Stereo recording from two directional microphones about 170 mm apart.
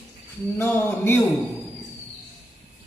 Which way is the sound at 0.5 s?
10° left (ahead or behind).